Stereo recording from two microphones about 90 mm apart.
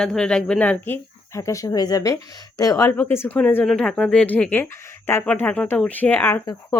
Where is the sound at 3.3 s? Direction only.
20° left (ahead or behind).